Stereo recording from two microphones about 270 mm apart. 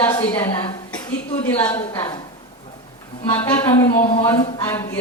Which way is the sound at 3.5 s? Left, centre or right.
Centre.